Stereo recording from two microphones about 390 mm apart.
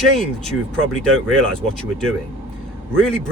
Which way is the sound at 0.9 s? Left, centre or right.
Centre.